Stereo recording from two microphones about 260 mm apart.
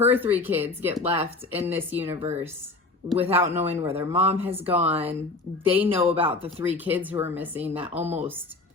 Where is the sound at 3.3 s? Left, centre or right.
Centre.